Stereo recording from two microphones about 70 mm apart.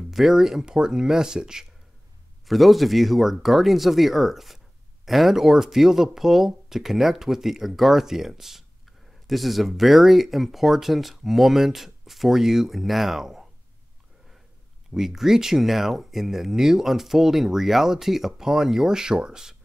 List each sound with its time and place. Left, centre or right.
0.1 s speech: centre
15.0 s speech: centre